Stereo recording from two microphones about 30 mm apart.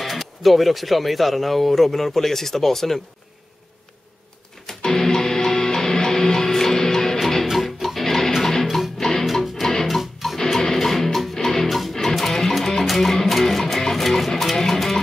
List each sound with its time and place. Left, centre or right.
0.0 s speech: centre
4.6 s music: centre
7.5 s music: centre
9.2 s music: centre
9.6 s music: centre
9.8 s music: centre
10.4 s music: centre
11.7 s music: centre